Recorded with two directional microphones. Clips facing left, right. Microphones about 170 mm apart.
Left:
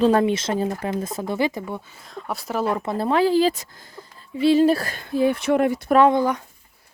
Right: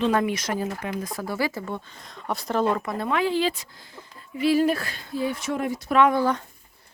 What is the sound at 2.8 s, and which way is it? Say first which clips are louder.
Speech: left 5 dB; 30° left (ahead or behind).